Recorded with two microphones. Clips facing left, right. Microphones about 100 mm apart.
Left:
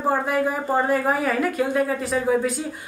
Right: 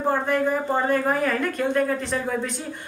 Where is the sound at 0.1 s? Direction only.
5° left (ahead or behind).